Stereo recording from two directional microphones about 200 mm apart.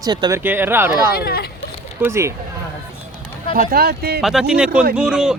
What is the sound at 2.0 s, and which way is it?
Speech, 15° right (ahead or behind).